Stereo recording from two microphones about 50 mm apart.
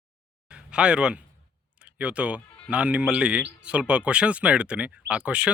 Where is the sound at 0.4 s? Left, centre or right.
Centre.